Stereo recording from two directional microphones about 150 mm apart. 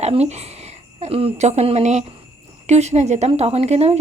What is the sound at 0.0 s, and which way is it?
A woman's voice, 45° right (ahead or behind).